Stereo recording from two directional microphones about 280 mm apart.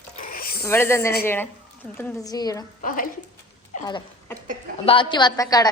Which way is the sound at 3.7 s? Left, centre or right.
Centre.